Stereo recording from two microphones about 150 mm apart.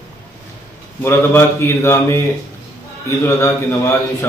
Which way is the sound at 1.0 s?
15° left (ahead or behind).